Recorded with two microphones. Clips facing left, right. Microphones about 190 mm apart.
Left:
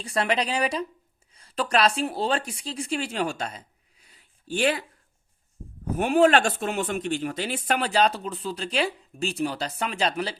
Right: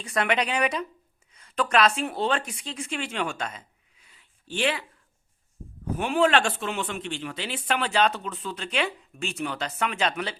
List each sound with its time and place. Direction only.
0.0 s speech: 30° left (ahead or behind)
6.0 s speech: 45° left (ahead or behind)